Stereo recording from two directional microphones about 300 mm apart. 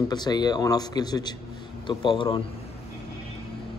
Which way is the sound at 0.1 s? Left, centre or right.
Centre.